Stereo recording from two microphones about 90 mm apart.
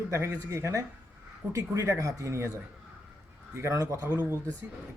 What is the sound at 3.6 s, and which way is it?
Speech, 35° right (ahead or behind).